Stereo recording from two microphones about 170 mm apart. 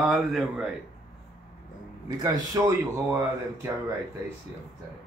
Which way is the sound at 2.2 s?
20° right (ahead or behind).